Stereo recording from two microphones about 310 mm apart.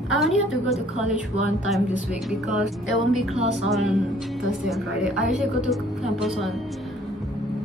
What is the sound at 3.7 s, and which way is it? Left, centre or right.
A woman's voice, centre.